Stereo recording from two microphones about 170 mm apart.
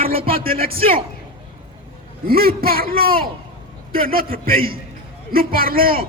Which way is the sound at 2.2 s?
60° right (ahead or behind).